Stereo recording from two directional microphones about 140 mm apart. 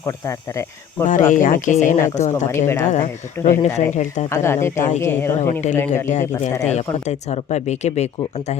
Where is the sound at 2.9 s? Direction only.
60° left (ahead or behind).